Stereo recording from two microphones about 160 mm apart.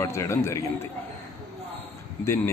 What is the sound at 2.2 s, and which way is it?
Speech, 15° left (ahead or behind).